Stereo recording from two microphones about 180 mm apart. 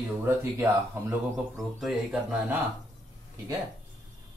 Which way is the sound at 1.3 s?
Centre (ahead or behind).